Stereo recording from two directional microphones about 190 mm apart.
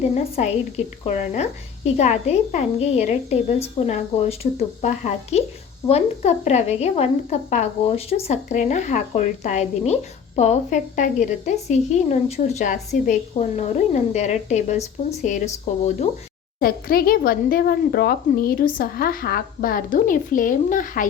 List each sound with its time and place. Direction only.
0.1 s a woman's voice: 35° left (ahead or behind)
16.6 s speech: 50° left (ahead or behind)